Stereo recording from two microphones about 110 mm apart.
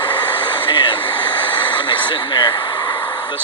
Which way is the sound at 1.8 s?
50° left (ahead or behind).